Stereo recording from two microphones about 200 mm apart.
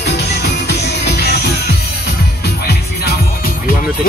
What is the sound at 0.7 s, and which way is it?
Music, 55° left (ahead or behind).